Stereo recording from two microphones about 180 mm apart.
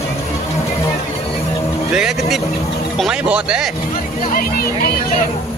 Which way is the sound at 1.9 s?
Centre (ahead or behind).